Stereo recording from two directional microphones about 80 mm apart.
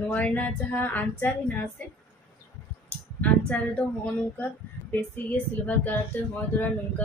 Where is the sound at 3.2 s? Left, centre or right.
Centre.